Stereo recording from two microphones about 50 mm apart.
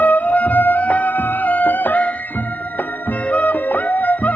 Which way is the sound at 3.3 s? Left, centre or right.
Left.